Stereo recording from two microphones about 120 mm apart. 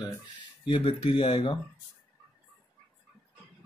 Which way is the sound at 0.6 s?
50° left (ahead or behind).